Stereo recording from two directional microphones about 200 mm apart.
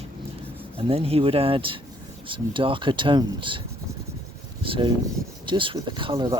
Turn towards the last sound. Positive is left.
turn(degrees=-25)  # may be behind; listen again after turning